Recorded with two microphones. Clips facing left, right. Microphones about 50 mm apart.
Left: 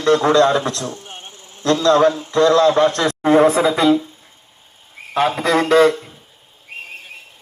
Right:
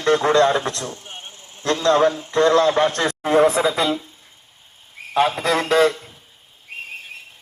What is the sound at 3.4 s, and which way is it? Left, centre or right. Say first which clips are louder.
Speech: left 3 dB; centre.